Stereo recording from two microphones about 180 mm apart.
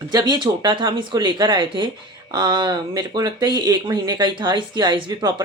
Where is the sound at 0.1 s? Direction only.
25° right (ahead or behind).